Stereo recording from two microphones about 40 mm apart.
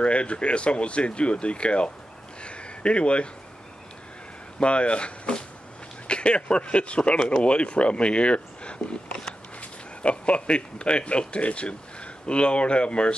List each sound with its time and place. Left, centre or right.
0.0 s speech: left
2.4 s a sound: left
4.6 s speech: left